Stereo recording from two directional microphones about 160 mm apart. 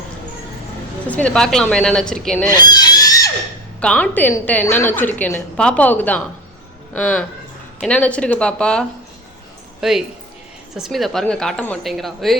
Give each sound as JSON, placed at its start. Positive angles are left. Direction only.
{"t": 1.0, "sound": "a woman's voice", "side_deg": 10}
{"t": 2.5, "sound": "a sound", "side_deg": 25}
{"t": 3.8, "sound": "a woman's voice", "side_deg": 5}